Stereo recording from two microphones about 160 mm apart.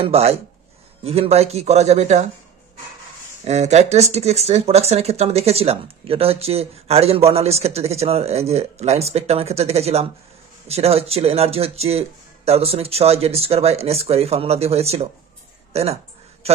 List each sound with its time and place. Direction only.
0.0 s speech: 40° right (ahead or behind)
3.4 s a man's voice: 45° right (ahead or behind)